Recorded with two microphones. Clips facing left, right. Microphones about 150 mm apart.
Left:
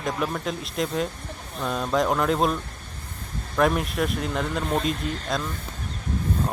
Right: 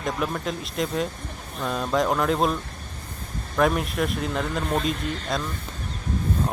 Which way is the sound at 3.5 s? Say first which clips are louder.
Even; centre (ahead or behind).